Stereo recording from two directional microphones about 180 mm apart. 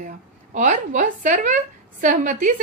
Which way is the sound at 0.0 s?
45° right (ahead or behind).